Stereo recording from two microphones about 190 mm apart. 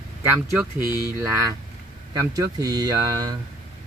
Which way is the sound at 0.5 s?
10° right (ahead or behind).